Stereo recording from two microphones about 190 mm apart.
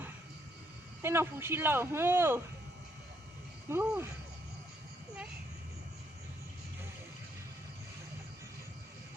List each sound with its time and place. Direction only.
1.0 s speech: 10° right (ahead or behind)
3.7 s speech: 10° right (ahead or behind)